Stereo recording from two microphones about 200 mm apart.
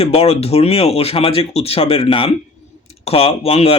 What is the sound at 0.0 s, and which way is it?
Speech, 30° left (ahead or behind).